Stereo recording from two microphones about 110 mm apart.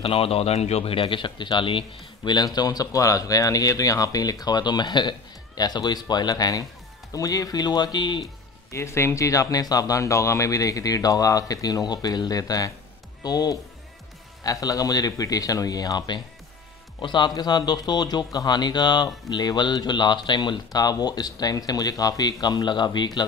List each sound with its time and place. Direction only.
0.0 s speech: 60° left (ahead or behind); by 8.3 s 40° left (ahead or behind)
8.7 s speech: 25° left (ahead or behind)